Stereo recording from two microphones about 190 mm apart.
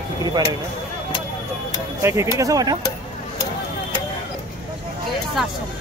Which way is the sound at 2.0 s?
15° right (ahead or behind).